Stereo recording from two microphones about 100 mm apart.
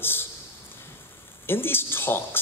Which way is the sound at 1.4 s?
20° left (ahead or behind).